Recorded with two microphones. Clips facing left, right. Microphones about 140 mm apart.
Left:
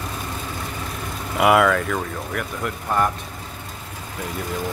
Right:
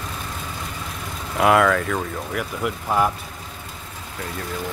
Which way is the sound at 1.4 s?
5° left (ahead or behind).